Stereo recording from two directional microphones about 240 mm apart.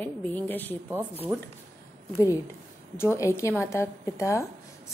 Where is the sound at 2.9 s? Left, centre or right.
Centre.